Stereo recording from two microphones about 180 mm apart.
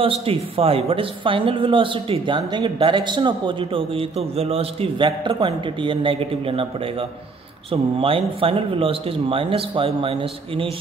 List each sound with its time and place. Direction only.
0.0 s speech: 30° right (ahead or behind)